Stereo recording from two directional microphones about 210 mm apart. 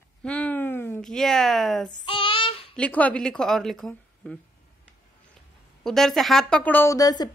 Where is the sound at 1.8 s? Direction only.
25° left (ahead or behind).